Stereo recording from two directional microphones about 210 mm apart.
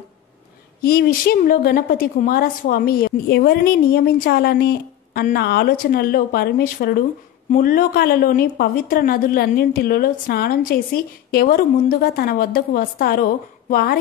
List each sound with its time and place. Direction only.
0.8 s a woman's voice: 45° left (ahead or behind)